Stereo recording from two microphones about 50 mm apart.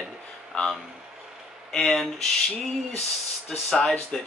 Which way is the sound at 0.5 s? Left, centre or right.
Centre.